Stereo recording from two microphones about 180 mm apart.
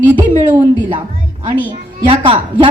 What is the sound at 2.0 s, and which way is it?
Speech, 25° right (ahead or behind).